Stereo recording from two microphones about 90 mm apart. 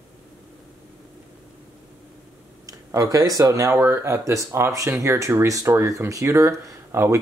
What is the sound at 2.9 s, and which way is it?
Speech, 40° right (ahead or behind).